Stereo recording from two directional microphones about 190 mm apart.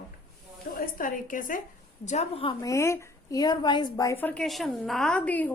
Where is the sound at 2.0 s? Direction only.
35° left (ahead or behind).